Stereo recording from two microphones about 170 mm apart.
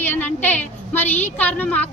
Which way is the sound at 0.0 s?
10° left (ahead or behind).